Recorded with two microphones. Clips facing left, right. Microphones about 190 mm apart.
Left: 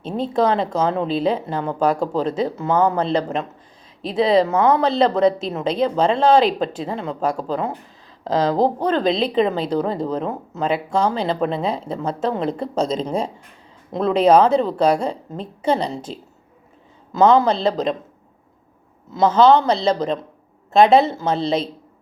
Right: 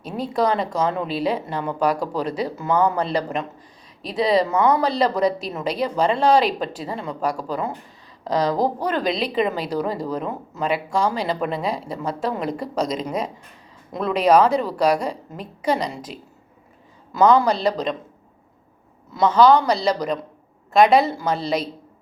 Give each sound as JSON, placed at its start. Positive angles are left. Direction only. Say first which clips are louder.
{"t": 0.0, "sound": "a woman's voice", "louder": "left 3 dB", "side_deg": 25}
{"t": 6.4, "sound": "a woman's voice", "louder": "left 4 dB", "side_deg": 0}
{"t": 7.0, "sound": "a woman's voice", "louder": "left 2 dB", "side_deg": 25}
{"t": 17.2, "sound": "a woman's voice", "louder": "left 2 dB", "side_deg": 25}
{"t": 19.1, "sound": "a woman's voice", "louder": "left 1 dB", "side_deg": 25}